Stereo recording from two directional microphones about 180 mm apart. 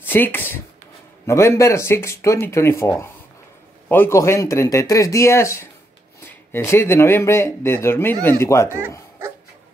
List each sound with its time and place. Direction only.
0.0 s speech: 10° left (ahead or behind)